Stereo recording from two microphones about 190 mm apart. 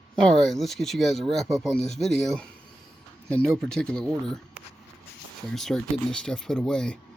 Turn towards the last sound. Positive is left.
turn(degrees=5)  # may be behind; listen again after turning